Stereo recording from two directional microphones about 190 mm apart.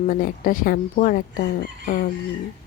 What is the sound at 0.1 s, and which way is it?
Speech, 45° left (ahead or behind).